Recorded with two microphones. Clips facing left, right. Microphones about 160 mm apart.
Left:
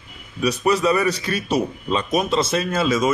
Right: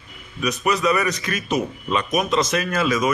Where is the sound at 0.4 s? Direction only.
30° left (ahead or behind).